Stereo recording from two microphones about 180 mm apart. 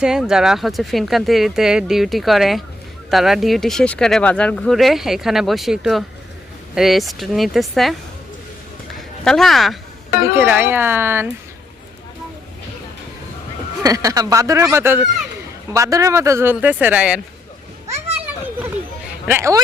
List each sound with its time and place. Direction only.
0.0 s speech: 5° right (ahead or behind)
9.0 s a woman's voice: centre (ahead or behind)
10.3 s speech: 10° right (ahead or behind)
13.8 s speech: 20° right (ahead or behind)
19.3 s speech: 15° right (ahead or behind)